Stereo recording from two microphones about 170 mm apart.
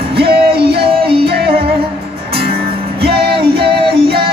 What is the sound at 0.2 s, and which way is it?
Music, 70° right (ahead or behind).